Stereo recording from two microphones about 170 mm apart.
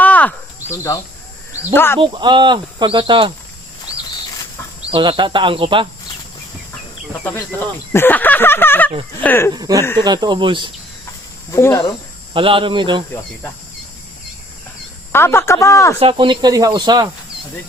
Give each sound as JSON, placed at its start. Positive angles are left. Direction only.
{"t": 0.0, "sound": "a sound", "side_deg": 10}
{"t": 1.5, "sound": "speech", "side_deg": 15}
{"t": 2.0, "sound": "speech", "side_deg": -25}
{"t": 4.9, "sound": "speech", "side_deg": -30}
{"t": 7.3, "sound": "a sound", "side_deg": 10}
{"t": 9.5, "sound": "speech", "side_deg": -20}
{"t": 11.5, "sound": "speech", "side_deg": 20}
{"t": 12.3, "sound": "speech", "side_deg": -30}
{"t": 15.1, "sound": "a sound", "side_deg": 15}
{"t": 16.0, "sound": "speech", "side_deg": -30}